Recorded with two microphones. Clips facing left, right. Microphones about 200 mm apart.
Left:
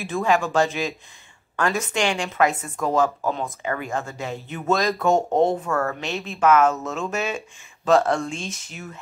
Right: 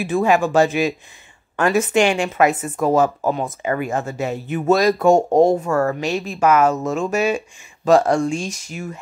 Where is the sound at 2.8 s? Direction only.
45° right (ahead or behind).